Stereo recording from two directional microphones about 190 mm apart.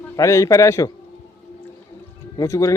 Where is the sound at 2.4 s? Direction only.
15° left (ahead or behind).